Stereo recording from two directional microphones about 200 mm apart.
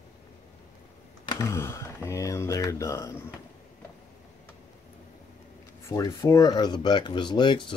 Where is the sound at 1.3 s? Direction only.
15° left (ahead or behind).